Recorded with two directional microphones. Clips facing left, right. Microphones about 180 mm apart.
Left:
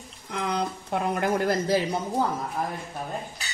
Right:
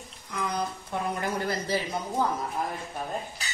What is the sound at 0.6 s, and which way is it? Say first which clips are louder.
Speech: left 3 dB; 80° left.